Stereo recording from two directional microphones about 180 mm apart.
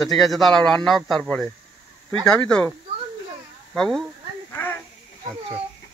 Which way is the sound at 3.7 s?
5° left (ahead or behind).